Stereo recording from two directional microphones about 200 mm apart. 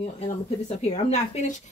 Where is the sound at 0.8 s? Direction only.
35° left (ahead or behind).